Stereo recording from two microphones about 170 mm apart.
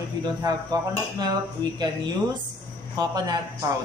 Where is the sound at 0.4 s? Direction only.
25° right (ahead or behind).